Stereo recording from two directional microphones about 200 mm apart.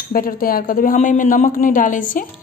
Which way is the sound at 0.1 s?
45° left (ahead or behind).